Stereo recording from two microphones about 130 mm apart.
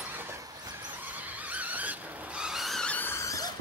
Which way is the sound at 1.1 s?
10° right (ahead or behind).